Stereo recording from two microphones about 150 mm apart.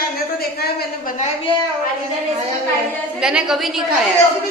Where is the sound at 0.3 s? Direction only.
90° left.